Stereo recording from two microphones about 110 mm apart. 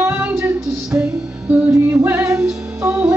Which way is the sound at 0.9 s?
10° right (ahead or behind).